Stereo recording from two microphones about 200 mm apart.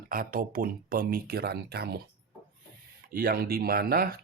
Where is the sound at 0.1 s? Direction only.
45° right (ahead or behind).